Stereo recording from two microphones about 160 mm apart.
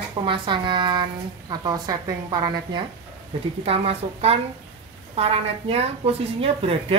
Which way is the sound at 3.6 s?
40° right (ahead or behind).